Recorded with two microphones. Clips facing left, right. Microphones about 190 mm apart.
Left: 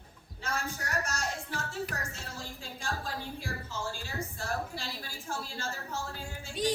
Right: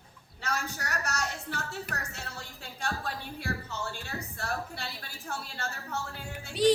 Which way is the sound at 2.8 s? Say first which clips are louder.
Right 2 dB; 65° right (ahead or behind).